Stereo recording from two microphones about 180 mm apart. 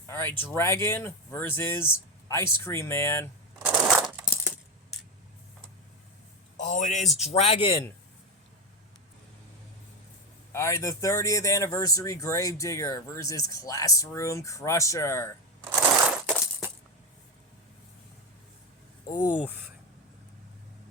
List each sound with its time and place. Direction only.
0.1 s speech: 10° left (ahead or behind)
3.6 s coin: 5° right (ahead or behind)
6.6 s a sound: 45° left (ahead or behind)
7.2 s a man's voice: 35° left (ahead or behind)
10.5 s speech: 15° left (ahead or behind)
15.6 s crushing: 5° right (ahead or behind)